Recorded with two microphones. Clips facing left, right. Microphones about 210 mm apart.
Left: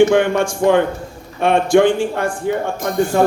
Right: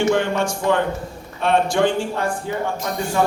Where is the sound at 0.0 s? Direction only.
55° left (ahead or behind).